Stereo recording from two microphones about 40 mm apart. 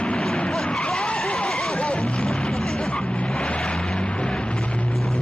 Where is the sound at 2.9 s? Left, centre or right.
Left.